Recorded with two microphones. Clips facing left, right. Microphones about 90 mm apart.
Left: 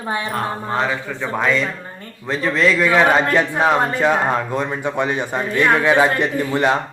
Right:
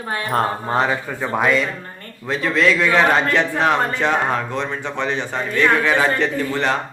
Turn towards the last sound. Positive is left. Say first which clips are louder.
# left 2 dB
turn(degrees=15)  # may be behind; listen again after turning